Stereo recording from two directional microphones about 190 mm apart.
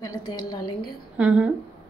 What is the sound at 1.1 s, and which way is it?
Speech, 5° right (ahead or behind).